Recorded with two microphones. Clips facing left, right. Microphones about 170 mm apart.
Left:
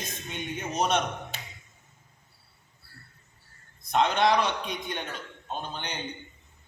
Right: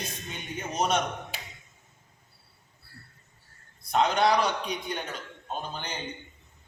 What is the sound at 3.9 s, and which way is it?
A man's voice, 5° right (ahead or behind).